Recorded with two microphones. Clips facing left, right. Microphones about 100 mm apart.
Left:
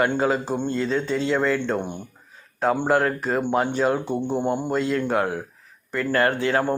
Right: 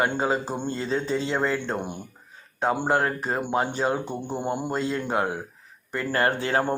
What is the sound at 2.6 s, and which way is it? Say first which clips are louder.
Speech: left 3 dB; 5° right (ahead or behind).